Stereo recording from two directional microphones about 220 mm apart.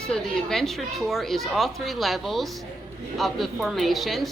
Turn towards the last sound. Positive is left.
turn(degrees=0)  # may be behind; listen again after turning